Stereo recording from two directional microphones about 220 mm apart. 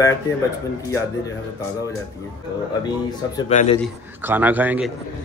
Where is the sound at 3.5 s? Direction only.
30° left (ahead or behind).